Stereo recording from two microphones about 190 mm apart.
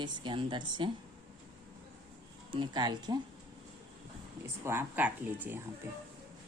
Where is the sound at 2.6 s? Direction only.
20° right (ahead or behind).